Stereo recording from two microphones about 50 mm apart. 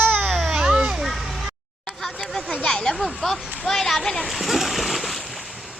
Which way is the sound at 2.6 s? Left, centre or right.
Centre.